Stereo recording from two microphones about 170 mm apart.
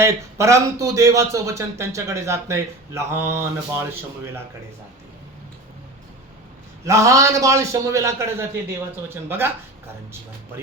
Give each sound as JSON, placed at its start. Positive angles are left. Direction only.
{"t": 0.0, "sound": "speech", "side_deg": -15}
{"t": 6.8, "sound": "speech", "side_deg": -20}